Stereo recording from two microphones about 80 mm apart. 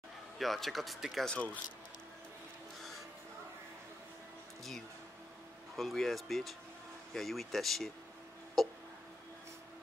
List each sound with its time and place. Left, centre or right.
0.4 s speech: centre
1.3 s speech: centre
5.8 s speech: centre